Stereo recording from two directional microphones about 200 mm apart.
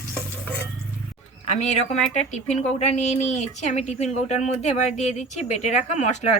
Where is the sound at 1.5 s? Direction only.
35° left (ahead or behind).